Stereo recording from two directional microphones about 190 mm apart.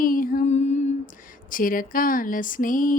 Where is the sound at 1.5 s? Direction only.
45° left (ahead or behind).